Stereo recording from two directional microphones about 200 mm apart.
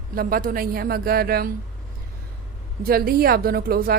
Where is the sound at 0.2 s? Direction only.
45° right (ahead or behind).